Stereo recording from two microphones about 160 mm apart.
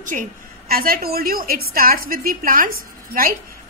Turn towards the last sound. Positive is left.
turn(degrees=-65)  # may be behind; listen again after turning